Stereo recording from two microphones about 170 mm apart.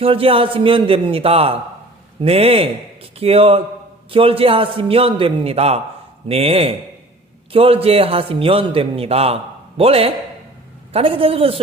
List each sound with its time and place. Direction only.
0.0 s a man's voice: 35° right (ahead or behind)